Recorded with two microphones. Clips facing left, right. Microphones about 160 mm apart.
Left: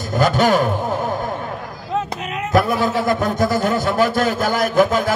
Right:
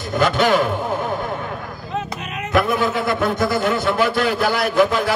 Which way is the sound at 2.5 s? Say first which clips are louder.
Left 1 dB; 40° left (ahead or behind).